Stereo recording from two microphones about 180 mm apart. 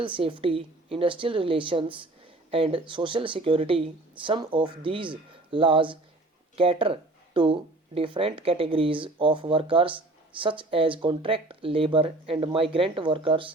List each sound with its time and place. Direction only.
0.0 s speech: 30° right (ahead or behind)